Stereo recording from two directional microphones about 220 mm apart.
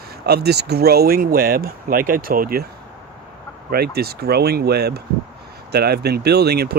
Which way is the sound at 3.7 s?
45° right (ahead or behind).